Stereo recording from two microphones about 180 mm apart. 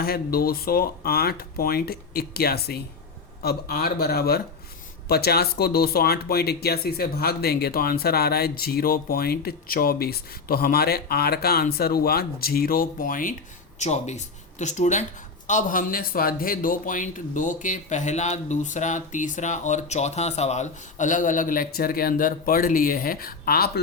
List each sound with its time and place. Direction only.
0.0 s a man's voice: 60° left (ahead or behind)